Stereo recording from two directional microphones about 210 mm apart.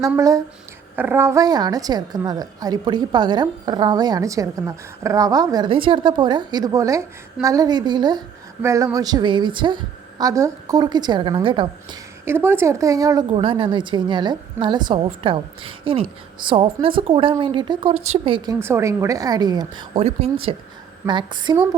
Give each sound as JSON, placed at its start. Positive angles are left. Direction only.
{"t": 0.0, "sound": "a woman's voice", "side_deg": -15}
{"t": 12.2, "sound": "a woman's voice", "side_deg": -10}
{"t": 18.6, "sound": "a woman's voice", "side_deg": -15}